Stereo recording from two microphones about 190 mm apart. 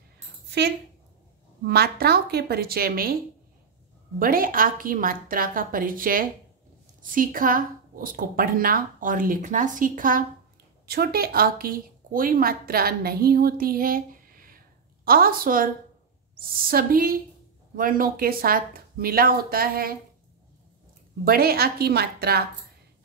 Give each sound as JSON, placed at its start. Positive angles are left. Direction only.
{"t": 0.5, "sound": "a woman's voice", "side_deg": -60}
{"t": 4.2, "sound": "a woman's voice", "side_deg": -50}
{"t": 21.2, "sound": "a woman's voice", "side_deg": -50}